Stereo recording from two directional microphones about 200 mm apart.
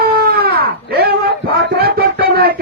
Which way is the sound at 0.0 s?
50° right (ahead or behind).